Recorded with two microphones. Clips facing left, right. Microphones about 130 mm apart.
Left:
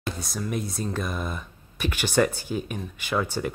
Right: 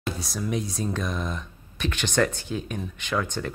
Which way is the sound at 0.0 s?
Centre (ahead or behind).